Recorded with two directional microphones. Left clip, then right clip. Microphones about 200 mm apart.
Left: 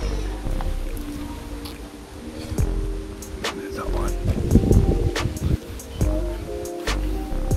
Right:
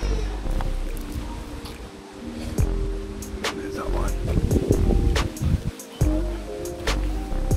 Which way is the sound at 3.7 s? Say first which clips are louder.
Left 1 dB; centre (ahead or behind).